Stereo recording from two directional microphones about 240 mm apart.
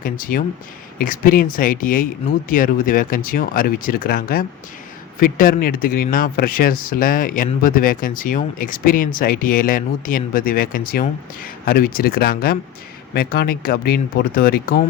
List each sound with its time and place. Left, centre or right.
0.0 s speech: left